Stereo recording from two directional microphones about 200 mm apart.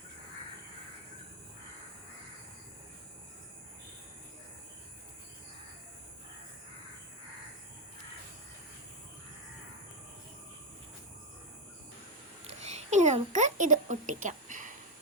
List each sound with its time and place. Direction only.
12.5 s a woman's voice: 35° right (ahead or behind)